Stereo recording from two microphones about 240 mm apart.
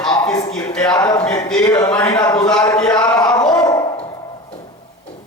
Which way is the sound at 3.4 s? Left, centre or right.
Centre.